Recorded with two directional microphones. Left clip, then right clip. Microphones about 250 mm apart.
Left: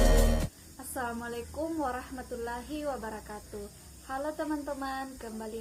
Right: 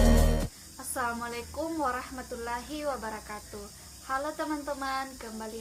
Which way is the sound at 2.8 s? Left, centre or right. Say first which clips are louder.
Right 3 dB; centre.